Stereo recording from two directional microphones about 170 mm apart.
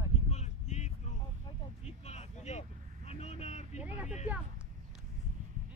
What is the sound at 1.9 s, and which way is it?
Vehicle, 40° left (ahead or behind).